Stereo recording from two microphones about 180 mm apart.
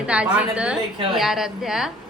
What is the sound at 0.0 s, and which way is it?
A woman's voice, 5° right (ahead or behind).